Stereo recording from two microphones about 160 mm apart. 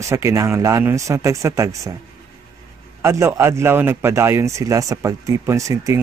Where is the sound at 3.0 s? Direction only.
15° right (ahead or behind).